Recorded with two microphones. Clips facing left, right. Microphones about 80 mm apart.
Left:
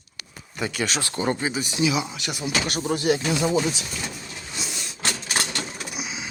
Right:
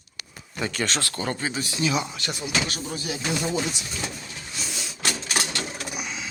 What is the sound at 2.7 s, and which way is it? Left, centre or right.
Speech, left.